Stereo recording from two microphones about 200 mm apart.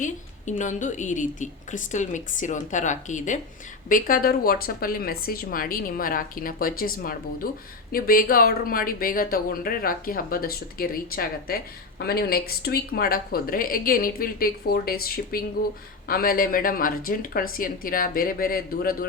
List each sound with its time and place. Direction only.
0.0 s a woman's voice: 40° left (ahead or behind)